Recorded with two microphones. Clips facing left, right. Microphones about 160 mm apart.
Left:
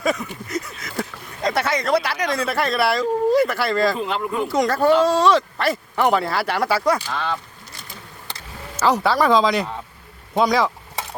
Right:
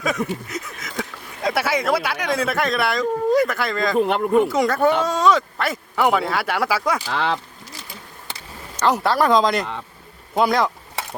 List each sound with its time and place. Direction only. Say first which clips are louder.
0.4 s speech: left 3 dB; centre (ahead or behind)
3.9 s speech: right 7 dB; 60° right (ahead or behind)
4.4 s speech: left 1 dB; centre (ahead or behind)
7.1 s speech: right 3 dB; 80° right
8.7 s speech: left 1 dB; centre (ahead or behind)